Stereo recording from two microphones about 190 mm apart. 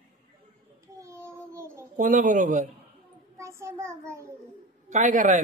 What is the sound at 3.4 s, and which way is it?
Child singing, 15° right (ahead or behind).